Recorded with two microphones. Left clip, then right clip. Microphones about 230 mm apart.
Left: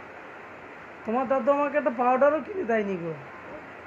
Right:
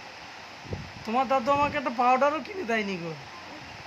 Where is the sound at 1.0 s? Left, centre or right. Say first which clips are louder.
Left 1 dB; right.